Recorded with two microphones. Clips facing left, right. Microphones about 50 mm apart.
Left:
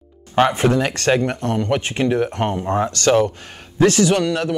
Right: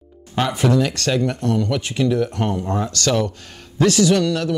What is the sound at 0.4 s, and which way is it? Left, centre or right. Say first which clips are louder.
Speech: left 2 dB; left.